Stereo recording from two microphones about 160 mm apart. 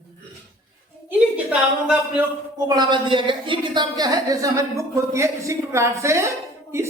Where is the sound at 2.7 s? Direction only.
30° right (ahead or behind).